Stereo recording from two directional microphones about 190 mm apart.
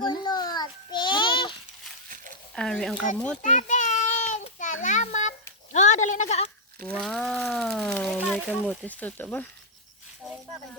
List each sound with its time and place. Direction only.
0.0 s child singing: 25° left (ahead or behind)
2.6 s speech: 5° left (ahead or behind)
3.4 s a sound: 40° left (ahead or behind)
6.7 s speech: 5° left (ahead or behind)